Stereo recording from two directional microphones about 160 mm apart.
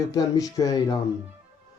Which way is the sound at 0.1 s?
20° left (ahead or behind).